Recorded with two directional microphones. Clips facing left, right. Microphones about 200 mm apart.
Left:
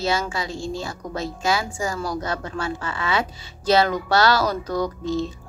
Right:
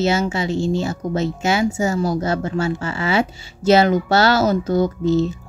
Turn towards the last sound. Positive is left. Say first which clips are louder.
# right 7 dB
turn(degrees=-25)  # may be behind; listen again after turning